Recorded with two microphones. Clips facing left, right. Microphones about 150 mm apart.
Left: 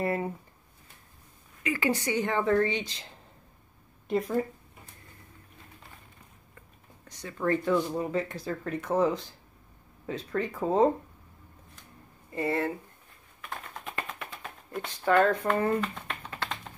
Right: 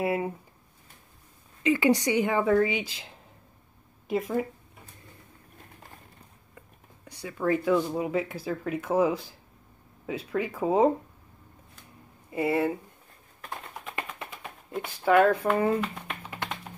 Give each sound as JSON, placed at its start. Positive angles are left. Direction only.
{"t": 0.0, "sound": "speech", "side_deg": -5}
{"t": 1.6, "sound": "speech", "side_deg": -20}
{"t": 4.1, "sound": "speech", "side_deg": -5}
{"t": 7.1, "sound": "speech", "side_deg": -10}
{"t": 12.3, "sound": "speech", "side_deg": -10}
{"t": 13.5, "sound": "bird", "side_deg": -20}
{"t": 14.8, "sound": "speech", "side_deg": -5}